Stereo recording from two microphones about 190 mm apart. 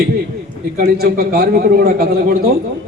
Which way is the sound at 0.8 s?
55° right (ahead or behind).